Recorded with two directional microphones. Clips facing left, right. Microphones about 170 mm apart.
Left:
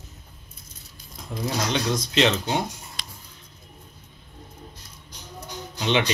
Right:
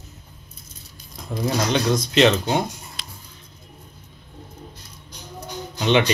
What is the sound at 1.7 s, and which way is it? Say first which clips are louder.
Speech: right 4 dB; 50° right (ahead or behind).